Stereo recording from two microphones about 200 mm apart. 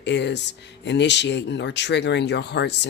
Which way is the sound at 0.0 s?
60° left (ahead or behind).